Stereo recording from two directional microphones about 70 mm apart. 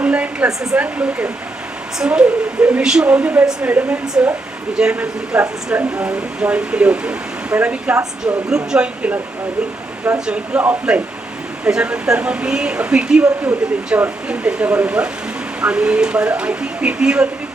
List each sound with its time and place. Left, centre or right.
0.0 s hair dryer: centre
0.8 s speech: centre
10.2 s speech: centre